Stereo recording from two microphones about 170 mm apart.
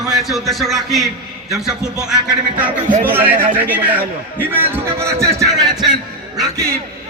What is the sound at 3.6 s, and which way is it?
A man's voice, 10° right (ahead or behind).